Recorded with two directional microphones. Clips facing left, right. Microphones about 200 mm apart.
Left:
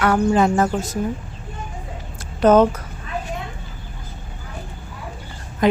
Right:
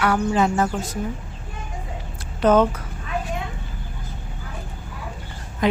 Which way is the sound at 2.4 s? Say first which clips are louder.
Left 3 dB; 40° left (ahead or behind).